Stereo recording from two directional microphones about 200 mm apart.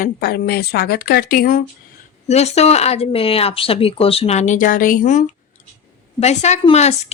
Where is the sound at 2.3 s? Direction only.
30° left (ahead or behind).